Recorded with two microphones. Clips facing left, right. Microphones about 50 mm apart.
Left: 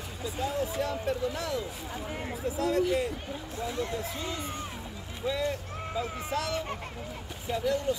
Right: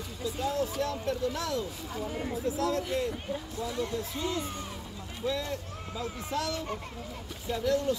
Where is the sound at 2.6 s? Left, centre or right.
Centre.